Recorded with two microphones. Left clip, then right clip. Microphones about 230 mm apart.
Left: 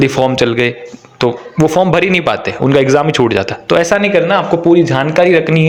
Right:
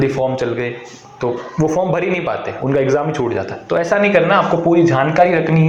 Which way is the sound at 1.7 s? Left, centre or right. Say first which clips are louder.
Left 7 dB; left.